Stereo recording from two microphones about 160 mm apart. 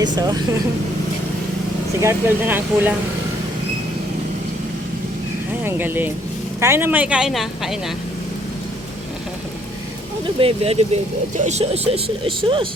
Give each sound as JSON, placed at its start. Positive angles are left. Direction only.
{"t": 0.0, "sound": "speech", "side_deg": -25}
{"t": 2.0, "sound": "speech", "side_deg": -15}
{"t": 5.6, "sound": "speech", "side_deg": -15}
{"t": 10.4, "sound": "speech", "side_deg": -40}